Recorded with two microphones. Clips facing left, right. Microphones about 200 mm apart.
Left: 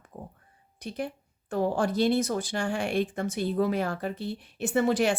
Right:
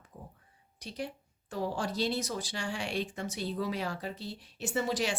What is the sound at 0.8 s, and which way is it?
Speech, 55° left (ahead or behind).